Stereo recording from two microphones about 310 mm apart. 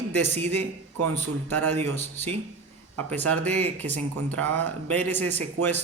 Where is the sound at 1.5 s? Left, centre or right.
Right.